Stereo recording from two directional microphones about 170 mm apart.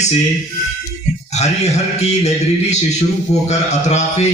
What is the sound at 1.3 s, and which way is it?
Speech, 40° left (ahead or behind).